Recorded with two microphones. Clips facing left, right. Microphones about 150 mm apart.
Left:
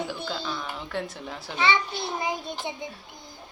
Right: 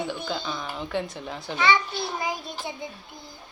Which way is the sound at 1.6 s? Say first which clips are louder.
Right 2 dB; 25° left (ahead or behind).